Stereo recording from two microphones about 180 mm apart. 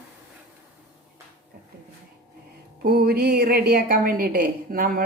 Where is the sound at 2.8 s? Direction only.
55° right (ahead or behind).